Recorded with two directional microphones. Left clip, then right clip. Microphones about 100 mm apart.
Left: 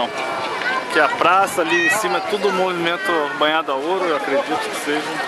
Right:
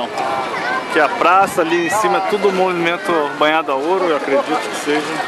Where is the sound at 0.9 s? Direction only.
5° left (ahead or behind).